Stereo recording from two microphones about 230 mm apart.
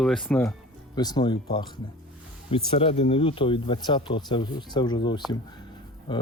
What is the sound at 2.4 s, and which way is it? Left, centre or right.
Speech, left.